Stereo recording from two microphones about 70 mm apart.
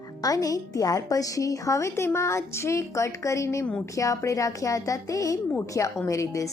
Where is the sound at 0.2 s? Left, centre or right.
Left.